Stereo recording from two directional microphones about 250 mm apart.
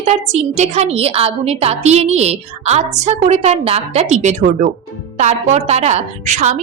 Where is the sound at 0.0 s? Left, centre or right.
Right.